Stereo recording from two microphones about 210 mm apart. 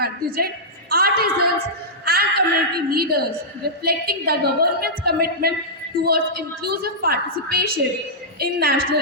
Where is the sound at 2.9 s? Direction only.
50° right (ahead or behind).